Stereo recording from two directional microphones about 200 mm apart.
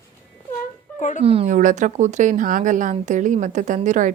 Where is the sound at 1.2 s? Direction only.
30° right (ahead or behind).